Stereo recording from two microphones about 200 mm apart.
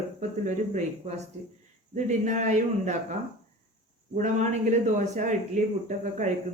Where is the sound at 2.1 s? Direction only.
35° right (ahead or behind).